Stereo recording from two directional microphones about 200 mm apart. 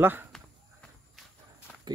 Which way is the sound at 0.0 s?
10° right (ahead or behind).